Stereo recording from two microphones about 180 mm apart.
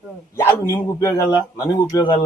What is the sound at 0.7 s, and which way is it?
A man's voice, 15° left (ahead or behind).